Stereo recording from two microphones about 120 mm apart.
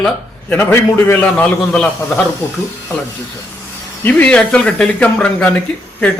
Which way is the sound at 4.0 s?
10° left (ahead or behind).